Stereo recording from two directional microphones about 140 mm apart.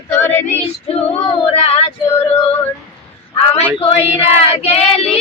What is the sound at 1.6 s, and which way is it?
Female singing, 40° left (ahead or behind).